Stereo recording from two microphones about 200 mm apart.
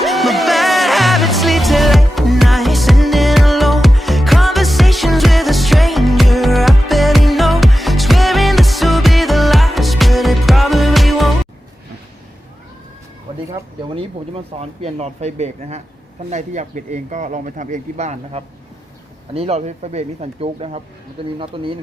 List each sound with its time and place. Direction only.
0.0 s music: centre (ahead or behind)
13.5 s speech: 30° right (ahead or behind)